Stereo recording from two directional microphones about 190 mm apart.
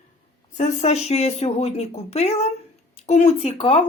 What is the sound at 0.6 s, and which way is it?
Speech, 35° left (ahead or behind).